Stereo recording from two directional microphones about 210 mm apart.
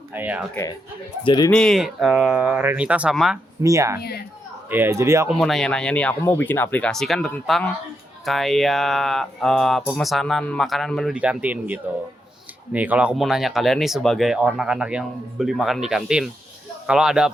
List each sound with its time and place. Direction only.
0.1 s speech: 10° right (ahead or behind)
0.5 s speech: 15° left (ahead or behind)
1.5 s speech: 5° left (ahead or behind)
3.6 s speech: 15° right (ahead or behind)
5.3 s speech: centre (ahead or behind)